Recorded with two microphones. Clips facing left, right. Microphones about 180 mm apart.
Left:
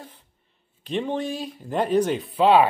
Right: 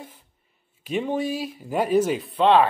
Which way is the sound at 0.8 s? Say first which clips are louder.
Right 1 dB; 10° right (ahead or behind).